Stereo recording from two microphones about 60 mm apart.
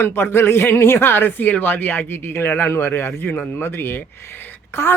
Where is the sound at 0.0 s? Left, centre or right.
Left.